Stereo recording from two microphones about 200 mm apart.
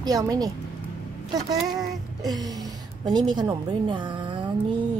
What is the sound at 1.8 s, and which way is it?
A woman's voice, 20° right (ahead or behind).